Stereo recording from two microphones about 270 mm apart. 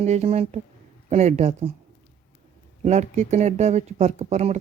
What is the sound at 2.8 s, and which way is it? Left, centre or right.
Speech, right.